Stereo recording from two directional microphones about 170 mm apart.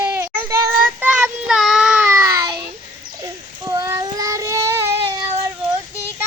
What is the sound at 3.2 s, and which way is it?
Child singing, 20° right (ahead or behind).